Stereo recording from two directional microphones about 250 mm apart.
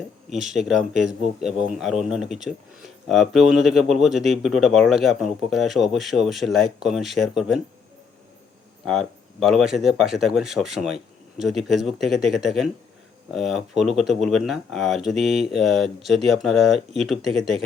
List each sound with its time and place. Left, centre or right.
0.3 s speech: right
0.5 s speech: centre
8.8 s speech: centre